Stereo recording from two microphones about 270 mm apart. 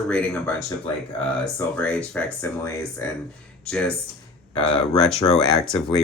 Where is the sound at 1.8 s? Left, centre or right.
Centre.